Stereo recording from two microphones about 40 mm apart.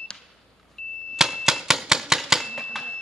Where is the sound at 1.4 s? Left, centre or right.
Centre.